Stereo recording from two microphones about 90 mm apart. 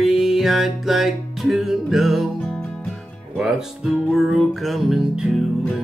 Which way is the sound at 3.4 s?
Centre (ahead or behind).